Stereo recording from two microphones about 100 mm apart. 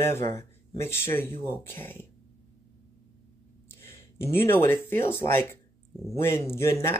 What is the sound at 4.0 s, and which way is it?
Speech, 25° left (ahead or behind).